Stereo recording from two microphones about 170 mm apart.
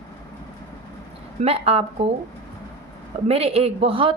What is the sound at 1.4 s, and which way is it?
Speech, 35° right (ahead or behind).